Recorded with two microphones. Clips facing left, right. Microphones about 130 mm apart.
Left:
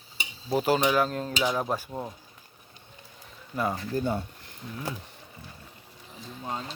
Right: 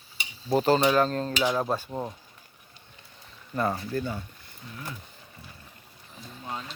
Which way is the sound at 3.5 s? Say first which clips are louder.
Right 1 dB; 10° left (ahead or behind).